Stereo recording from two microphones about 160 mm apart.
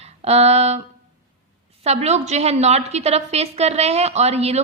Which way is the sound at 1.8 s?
40° right (ahead or behind).